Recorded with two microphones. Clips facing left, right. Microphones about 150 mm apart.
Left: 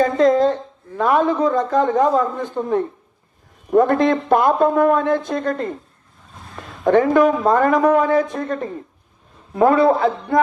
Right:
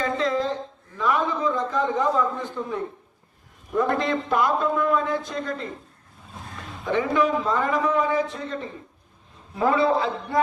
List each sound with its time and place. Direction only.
0.0 s a man's voice: 45° left (ahead or behind)
6.8 s a man's voice: 55° left (ahead or behind)